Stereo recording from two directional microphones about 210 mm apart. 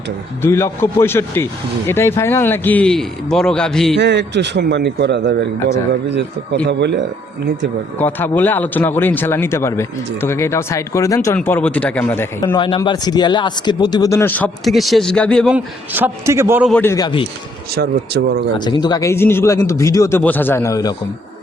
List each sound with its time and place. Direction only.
0.4 s a man's voice: 10° left (ahead or behind)
3.9 s a man's voice: 55° right (ahead or behind)
7.9 s speech: 10° left (ahead or behind)
12.5 s speech: 20° left (ahead or behind); by 15.5 s 5° left (ahead or behind)
15.5 s a man's voice: 10° right (ahead or behind)
16.7 s speech: 15° left (ahead or behind)
17.7 s speech: 50° right (ahead or behind)
18.5 s speech: 20° left (ahead or behind)